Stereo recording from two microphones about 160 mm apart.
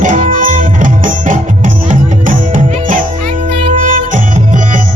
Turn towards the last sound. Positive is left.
turn(degrees=-55)  # may be behind; listen again after turning